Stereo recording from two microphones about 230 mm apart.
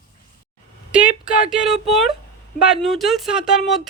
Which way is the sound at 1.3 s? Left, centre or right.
Centre.